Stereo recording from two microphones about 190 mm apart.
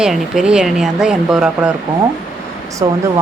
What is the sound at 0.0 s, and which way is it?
Speech, 5° right (ahead or behind).